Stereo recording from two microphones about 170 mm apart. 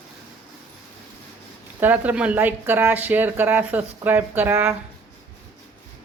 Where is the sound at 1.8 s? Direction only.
10° right (ahead or behind).